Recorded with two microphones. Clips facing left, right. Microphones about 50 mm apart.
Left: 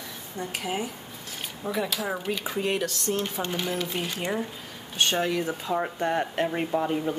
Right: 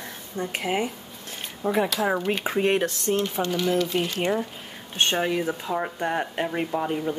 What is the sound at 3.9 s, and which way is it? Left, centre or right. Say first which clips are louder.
Speech: right 6 dB; centre.